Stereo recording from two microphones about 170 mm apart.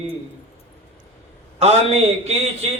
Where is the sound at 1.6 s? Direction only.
40° right (ahead or behind).